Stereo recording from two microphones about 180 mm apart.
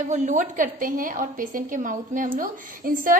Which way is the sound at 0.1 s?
45° right (ahead or behind).